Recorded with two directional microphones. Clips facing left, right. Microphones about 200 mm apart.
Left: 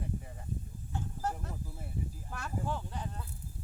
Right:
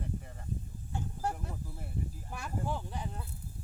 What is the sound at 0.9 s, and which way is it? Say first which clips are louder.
Vehicle: right 1 dB; 10° right (ahead or behind).